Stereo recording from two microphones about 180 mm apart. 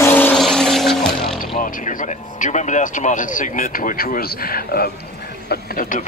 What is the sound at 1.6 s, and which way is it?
Speech, 50° left (ahead or behind).